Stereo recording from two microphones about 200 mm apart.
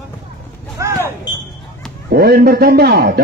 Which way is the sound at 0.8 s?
15° right (ahead or behind).